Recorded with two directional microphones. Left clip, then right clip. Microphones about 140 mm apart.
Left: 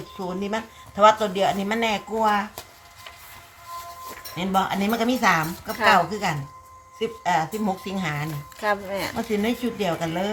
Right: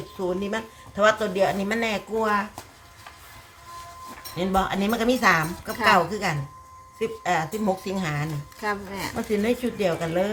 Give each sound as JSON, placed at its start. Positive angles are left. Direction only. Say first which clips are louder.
{"t": 0.2, "sound": "a woman's voice", "louder": "right 1 dB", "side_deg": -30}
{"t": 4.4, "sound": "a woman's voice", "louder": "left 1 dB", "side_deg": -30}
{"t": 8.6, "sound": "speech", "louder": "left 4 dB", "side_deg": 65}
{"t": 9.3, "sound": "a woman's voice", "louder": "right 3 dB", "side_deg": -30}